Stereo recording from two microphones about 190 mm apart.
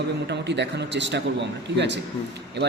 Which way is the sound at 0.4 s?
65° right (ahead or behind).